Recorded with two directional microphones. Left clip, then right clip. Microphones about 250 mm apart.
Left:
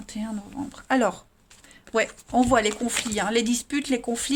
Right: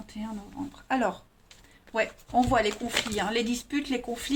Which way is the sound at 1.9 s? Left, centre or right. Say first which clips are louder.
Left 3 dB; left.